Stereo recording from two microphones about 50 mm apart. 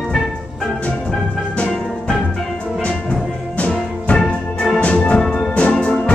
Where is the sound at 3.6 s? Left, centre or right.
Left.